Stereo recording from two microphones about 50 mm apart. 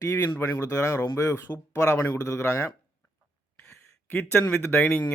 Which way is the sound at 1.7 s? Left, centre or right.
Left.